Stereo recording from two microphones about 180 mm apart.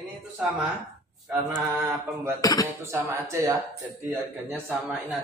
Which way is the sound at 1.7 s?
15° right (ahead or behind).